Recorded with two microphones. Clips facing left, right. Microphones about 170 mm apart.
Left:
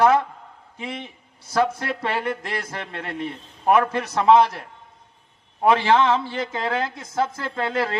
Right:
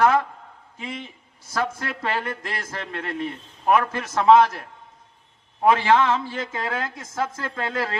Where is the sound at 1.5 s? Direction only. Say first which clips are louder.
Left 5 dB; 25° left (ahead or behind).